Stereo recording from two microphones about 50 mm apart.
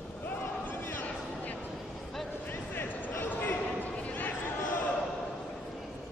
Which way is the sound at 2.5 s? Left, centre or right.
Left.